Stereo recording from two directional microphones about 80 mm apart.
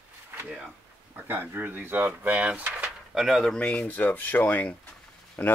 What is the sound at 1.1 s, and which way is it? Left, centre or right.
Speech, right.